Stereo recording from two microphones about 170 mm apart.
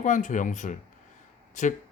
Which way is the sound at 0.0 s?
50° left (ahead or behind).